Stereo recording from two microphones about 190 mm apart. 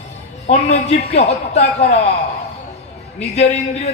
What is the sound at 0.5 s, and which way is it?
A man's voice, 35° left (ahead or behind).